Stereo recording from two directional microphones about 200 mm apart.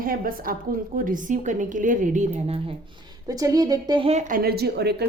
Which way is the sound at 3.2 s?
15° right (ahead or behind).